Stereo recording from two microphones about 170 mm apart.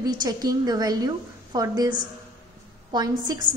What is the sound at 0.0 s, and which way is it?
A woman's voice, 25° right (ahead or behind).